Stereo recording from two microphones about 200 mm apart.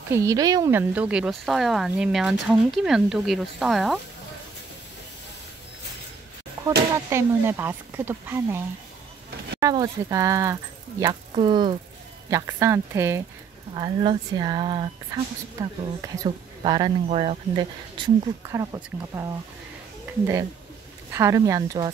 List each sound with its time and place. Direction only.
0.1 s speech: 15° right (ahead or behind); by 4.0 s centre (ahead or behind)
7.1 s speech: 10° right (ahead or behind)
9.6 s speech: 15° right (ahead or behind)
21.1 s speech: 15° right (ahead or behind)